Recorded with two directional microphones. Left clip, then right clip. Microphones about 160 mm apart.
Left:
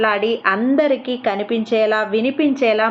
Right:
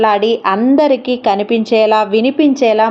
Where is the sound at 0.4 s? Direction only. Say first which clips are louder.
Right 3 dB; 40° right (ahead or behind).